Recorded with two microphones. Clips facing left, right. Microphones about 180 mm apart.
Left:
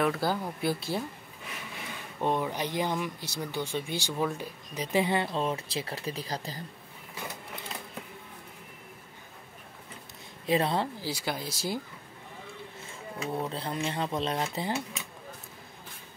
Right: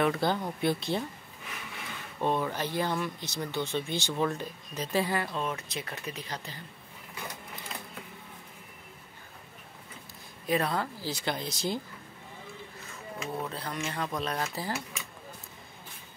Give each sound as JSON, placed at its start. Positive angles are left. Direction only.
{"t": 0.0, "sound": "speech", "side_deg": 5}
{"t": 2.1, "sound": "speech", "side_deg": 15}
{"t": 10.4, "sound": "speech", "side_deg": 25}
{"t": 11.0, "sound": "speech", "side_deg": 10}
{"t": 12.8, "sound": "speech", "side_deg": 25}